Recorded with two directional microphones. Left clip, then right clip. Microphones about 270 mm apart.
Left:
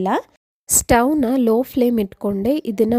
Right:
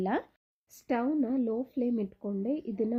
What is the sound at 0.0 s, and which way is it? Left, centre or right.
Speech, left.